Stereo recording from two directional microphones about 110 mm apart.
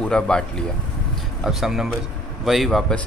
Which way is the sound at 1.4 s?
5° right (ahead or behind).